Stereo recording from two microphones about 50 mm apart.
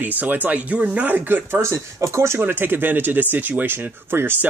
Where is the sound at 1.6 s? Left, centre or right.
Right.